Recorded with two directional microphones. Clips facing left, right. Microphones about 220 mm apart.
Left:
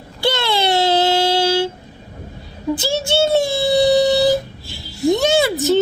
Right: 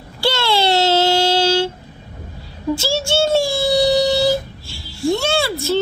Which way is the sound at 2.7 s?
20° left (ahead or behind).